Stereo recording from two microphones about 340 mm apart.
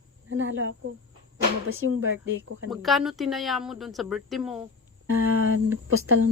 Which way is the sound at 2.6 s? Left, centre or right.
Centre.